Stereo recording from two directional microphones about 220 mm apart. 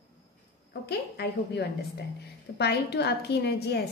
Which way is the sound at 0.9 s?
45° left (ahead or behind).